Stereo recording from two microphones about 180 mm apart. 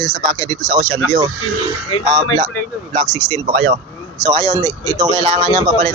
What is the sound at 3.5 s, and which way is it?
Speech, 50° right (ahead or behind).